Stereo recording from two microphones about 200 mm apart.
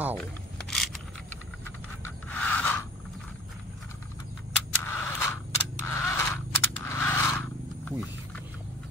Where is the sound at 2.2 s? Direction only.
5° left (ahead or behind).